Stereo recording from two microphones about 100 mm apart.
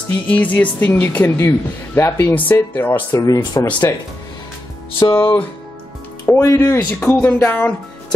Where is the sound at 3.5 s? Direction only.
50° left (ahead or behind).